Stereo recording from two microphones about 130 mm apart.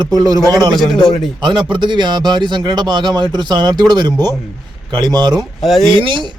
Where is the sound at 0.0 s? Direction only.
30° right (ahead or behind).